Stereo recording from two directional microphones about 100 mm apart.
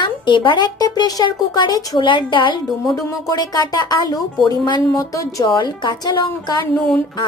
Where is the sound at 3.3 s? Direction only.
45° left (ahead or behind).